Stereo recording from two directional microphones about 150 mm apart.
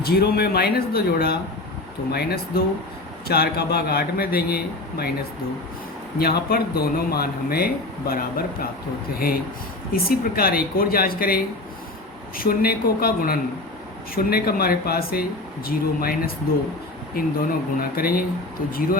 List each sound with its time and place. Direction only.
0.0 s speech: 90° left
6.1 s speech: 90° left
12.4 s speech: 85° left
17.7 s speech: 75° left (ahead or behind)